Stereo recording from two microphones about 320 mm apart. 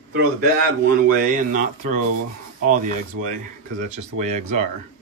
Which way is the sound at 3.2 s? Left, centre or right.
Right.